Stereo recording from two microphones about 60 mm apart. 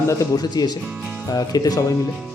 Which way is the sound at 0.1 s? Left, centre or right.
Left.